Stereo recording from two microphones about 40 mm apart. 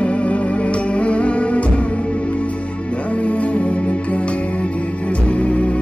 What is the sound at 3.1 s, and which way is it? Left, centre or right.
Music, left.